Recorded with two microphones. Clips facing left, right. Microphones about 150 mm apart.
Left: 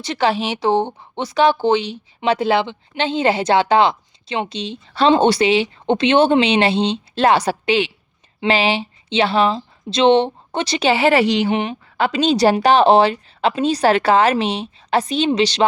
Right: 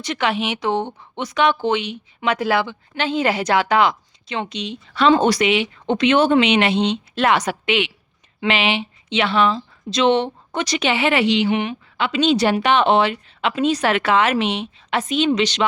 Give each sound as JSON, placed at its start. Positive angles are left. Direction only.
{"t": 0.0, "sound": "speech", "side_deg": 30}